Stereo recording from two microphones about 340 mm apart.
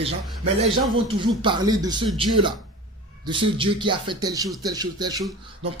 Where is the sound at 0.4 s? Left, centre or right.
Centre.